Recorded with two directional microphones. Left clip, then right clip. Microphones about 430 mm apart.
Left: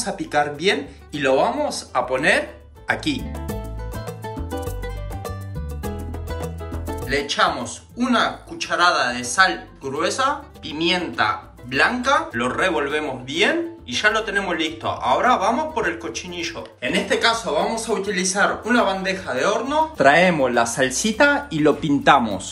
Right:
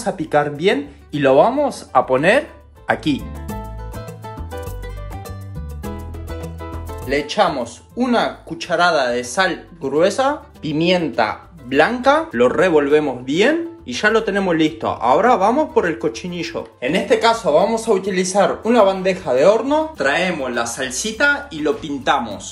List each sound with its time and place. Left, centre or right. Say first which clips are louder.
0.0 s speech: right 4 dB; centre
4.5 s music: left 2 dB; left
7.1 s speech: right 3 dB; centre
20.0 s speech: left 4 dB; centre